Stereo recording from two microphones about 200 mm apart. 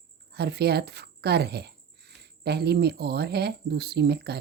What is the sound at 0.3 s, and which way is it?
Speech, 55° right (ahead or behind).